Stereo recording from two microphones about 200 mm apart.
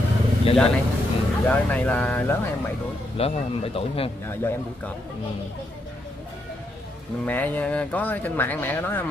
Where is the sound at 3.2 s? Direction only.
30° left (ahead or behind).